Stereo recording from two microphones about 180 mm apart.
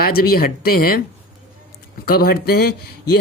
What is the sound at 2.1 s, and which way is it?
Speech, 55° left (ahead or behind).